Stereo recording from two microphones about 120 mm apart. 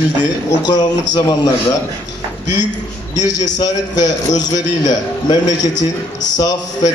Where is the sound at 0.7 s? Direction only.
35° left (ahead or behind).